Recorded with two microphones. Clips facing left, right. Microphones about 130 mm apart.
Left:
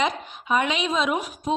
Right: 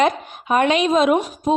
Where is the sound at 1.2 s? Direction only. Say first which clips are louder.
Right 7 dB; 40° right (ahead or behind).